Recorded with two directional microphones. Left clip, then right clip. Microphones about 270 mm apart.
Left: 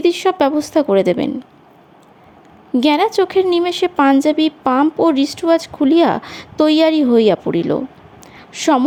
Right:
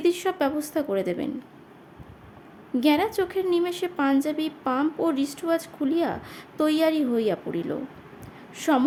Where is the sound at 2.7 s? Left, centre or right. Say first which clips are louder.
Left 9 dB; left.